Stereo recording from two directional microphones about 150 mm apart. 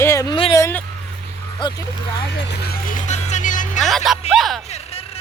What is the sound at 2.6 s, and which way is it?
Speech, 90° left.